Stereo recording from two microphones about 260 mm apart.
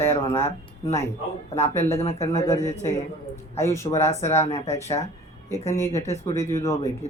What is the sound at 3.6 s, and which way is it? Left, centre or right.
Speech, centre.